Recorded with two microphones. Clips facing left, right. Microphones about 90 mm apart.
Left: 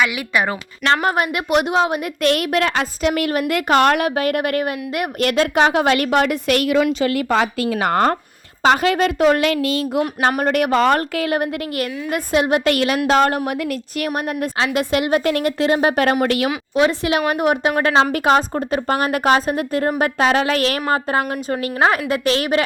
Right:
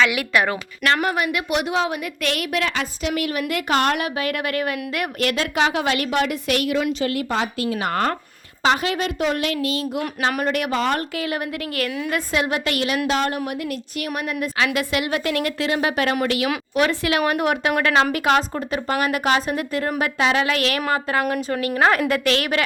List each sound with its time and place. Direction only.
1.0 s a woman's voice: 30° left (ahead or behind)
2.3 s a woman's voice: 50° left (ahead or behind)
4.2 s a woman's voice: 35° left (ahead or behind); by 7.4 s 85° left
7.7 s a child's voice: 60° left (ahead or behind)
8.6 s a woman's voice: 45° left (ahead or behind)
9.2 s a child's voice: 70° left (ahead or behind)
10.2 s a woman's voice: 50° left (ahead or behind)
11.3 s speech: 20° left (ahead or behind)
12.5 s a woman's voice: 50° left (ahead or behind)
14.4 s a woman's voice: 30° left (ahead or behind)
16.7 s a woman's voice: 25° left (ahead or behind)